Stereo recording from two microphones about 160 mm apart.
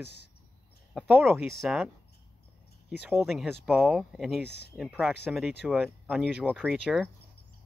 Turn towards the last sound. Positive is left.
turn(degrees=5)  # may be behind; listen again after turning